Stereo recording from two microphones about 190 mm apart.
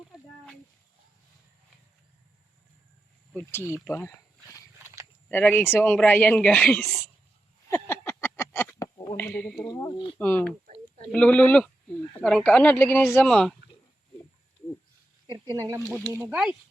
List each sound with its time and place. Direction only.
3.3 s speech: 15° left (ahead or behind)
3.8 s a sound: 15° left (ahead or behind)
5.3 s speech: 10° left (ahead or behind)
7.7 s a sound: 10° left (ahead or behind)
9.6 s speech: 20° left (ahead or behind)
10.2 s speech: 10° left (ahead or behind)
13.3 s speech: centre (ahead or behind)
15.3 s speech: 20° right (ahead or behind)